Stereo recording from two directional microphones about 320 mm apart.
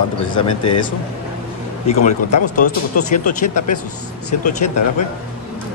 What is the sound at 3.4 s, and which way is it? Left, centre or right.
Speech, left.